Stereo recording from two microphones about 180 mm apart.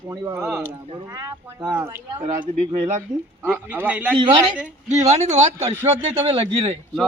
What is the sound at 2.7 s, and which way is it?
Speech, 40° right (ahead or behind).